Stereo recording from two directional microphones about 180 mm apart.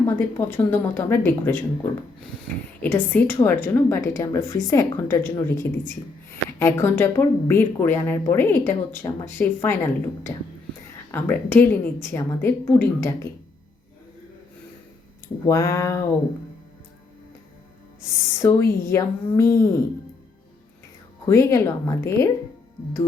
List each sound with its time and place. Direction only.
0.0 s speech: 10° left (ahead or behind)
2.8 s speech: 10° left (ahead or behind)
15.4 s speech: 15° left (ahead or behind)
18.0 s speech: 15° left (ahead or behind)
21.2 s speech: 15° left (ahead or behind)